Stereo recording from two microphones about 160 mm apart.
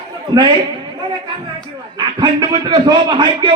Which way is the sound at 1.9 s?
25° right (ahead or behind).